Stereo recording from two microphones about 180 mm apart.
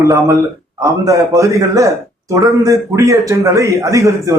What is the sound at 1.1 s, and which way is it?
A man's voice, 15° right (ahead or behind).